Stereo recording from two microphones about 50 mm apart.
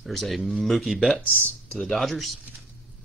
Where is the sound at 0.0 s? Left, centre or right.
Centre.